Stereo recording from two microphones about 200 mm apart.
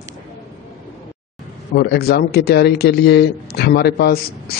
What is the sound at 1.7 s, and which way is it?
A man's voice, 50° left (ahead or behind).